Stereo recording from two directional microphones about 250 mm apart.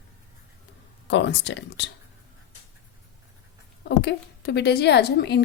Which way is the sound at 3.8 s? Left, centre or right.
Left.